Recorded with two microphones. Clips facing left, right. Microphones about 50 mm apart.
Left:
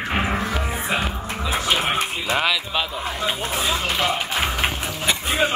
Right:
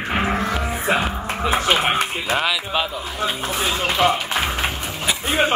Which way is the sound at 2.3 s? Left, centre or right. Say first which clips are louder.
Even; centre.